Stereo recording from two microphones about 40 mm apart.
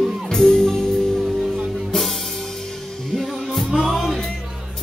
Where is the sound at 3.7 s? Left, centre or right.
Centre.